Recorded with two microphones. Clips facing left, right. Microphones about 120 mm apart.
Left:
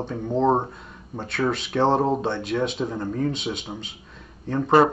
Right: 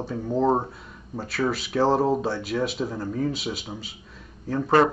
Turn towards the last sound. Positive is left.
turn(degrees=-5)  # may be behind; listen again after turning